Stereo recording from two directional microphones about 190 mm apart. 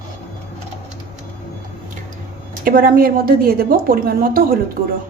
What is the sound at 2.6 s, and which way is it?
A woman's voice, 50° right (ahead or behind).